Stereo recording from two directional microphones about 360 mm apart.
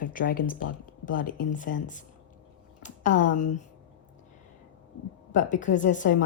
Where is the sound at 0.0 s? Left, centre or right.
Left.